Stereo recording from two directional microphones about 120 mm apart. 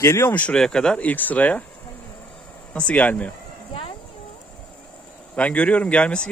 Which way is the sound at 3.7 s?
45° left (ahead or behind).